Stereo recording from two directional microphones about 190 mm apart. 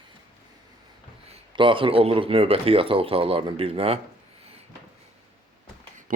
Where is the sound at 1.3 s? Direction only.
25° right (ahead or behind).